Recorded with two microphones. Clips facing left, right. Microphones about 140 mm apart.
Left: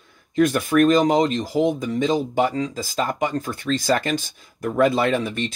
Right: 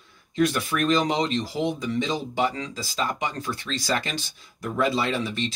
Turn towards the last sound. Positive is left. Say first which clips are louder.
# left 5 dB
turn(degrees=50)  # may be behind; listen again after turning